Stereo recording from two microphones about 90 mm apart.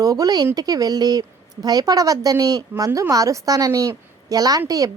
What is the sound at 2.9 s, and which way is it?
A woman's voice, 35° right (ahead or behind).